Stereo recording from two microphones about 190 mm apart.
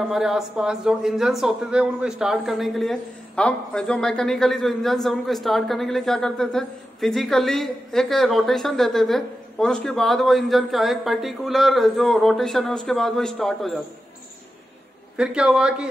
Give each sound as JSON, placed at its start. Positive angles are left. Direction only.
{"t": 0.0, "sound": "speech", "side_deg": 0}
{"t": 15.1, "sound": "speech", "side_deg": -5}